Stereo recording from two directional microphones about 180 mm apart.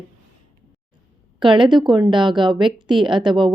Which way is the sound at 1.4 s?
25° right (ahead or behind).